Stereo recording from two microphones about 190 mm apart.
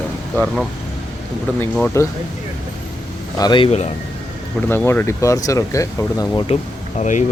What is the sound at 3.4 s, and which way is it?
Speech, 25° left (ahead or behind).